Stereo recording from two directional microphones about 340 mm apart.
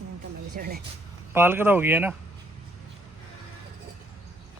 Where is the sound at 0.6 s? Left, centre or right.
Right.